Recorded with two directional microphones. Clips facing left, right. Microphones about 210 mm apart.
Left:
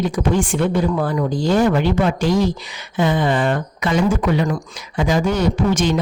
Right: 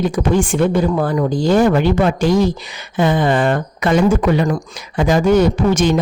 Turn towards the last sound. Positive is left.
turn(degrees=-50)  # may be behind; listen again after turning